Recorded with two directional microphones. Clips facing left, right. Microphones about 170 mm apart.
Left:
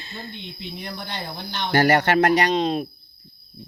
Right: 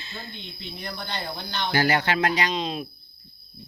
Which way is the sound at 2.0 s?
55° left (ahead or behind).